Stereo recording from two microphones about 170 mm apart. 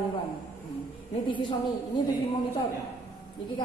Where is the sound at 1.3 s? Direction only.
30° left (ahead or behind).